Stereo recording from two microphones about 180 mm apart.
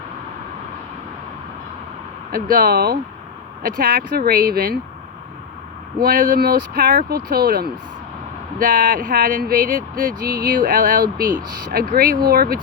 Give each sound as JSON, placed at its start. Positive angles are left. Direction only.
{"t": 2.3, "sound": "speech", "side_deg": -55}
{"t": 6.0, "sound": "speech", "side_deg": -50}